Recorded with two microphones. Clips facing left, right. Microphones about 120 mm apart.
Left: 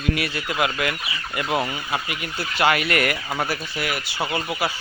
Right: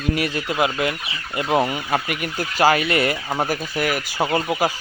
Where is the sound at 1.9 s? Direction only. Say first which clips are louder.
Right 5 dB; 50° right (ahead or behind).